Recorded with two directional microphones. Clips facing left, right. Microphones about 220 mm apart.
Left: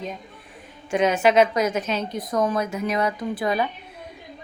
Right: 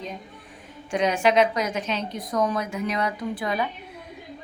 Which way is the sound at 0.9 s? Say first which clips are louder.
Left 2 dB; 5° left (ahead or behind).